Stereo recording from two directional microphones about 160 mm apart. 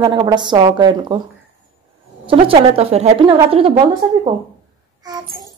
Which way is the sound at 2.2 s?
35° right (ahead or behind).